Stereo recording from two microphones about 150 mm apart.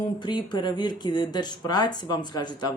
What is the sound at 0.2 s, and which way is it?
Speech, 30° left (ahead or behind).